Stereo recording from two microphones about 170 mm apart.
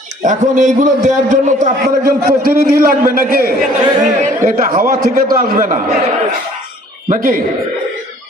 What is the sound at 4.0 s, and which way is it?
A man's voice, 50° right (ahead or behind).